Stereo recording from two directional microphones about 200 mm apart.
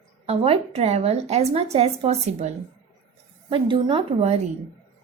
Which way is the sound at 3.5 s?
25° right (ahead or behind).